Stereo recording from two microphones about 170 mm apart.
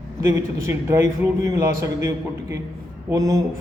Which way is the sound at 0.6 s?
15° right (ahead or behind).